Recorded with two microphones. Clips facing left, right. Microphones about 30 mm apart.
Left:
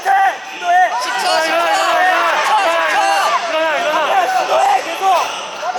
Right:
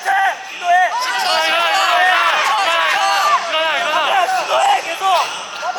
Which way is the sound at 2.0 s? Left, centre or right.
Right.